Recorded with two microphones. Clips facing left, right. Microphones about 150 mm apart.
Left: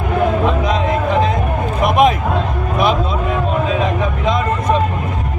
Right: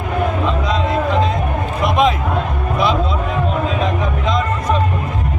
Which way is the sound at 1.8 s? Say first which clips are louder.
Left 3 dB; 50° left (ahead or behind).